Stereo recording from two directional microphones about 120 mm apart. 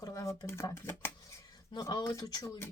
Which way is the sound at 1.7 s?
30° left (ahead or behind).